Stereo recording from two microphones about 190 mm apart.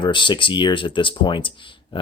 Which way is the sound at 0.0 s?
25° left (ahead or behind).